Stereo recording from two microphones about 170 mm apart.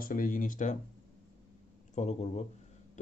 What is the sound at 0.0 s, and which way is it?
Speech, 55° left (ahead or behind).